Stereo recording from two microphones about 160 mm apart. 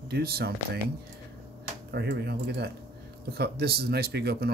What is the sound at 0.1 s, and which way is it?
Speech, 80° right.